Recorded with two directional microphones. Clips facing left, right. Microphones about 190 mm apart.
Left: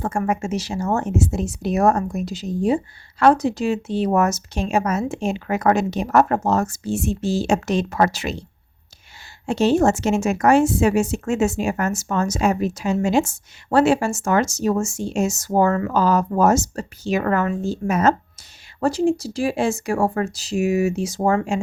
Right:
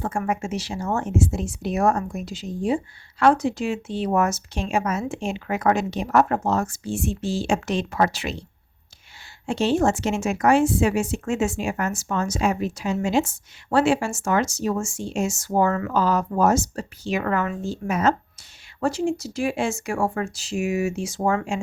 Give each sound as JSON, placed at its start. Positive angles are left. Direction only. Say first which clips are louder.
{"t": 0.0, "sound": "speech", "louder": "left 3 dB", "side_deg": 45}
{"t": 9.5, "sound": "speech", "louder": "left 4 dB", "side_deg": 40}